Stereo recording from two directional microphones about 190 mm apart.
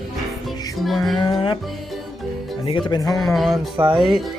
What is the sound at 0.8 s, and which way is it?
Music, centre (ahead or behind).